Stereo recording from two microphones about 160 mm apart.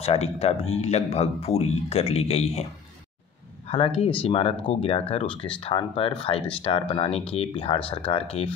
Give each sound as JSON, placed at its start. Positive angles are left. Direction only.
{"t": 0.0, "sound": "speech", "side_deg": 40}
{"t": 3.6, "sound": "speech", "side_deg": 35}